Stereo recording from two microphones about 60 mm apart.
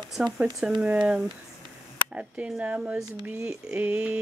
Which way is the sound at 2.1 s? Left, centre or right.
Right.